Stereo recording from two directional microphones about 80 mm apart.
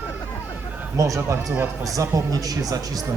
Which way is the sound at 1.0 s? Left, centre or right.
Right.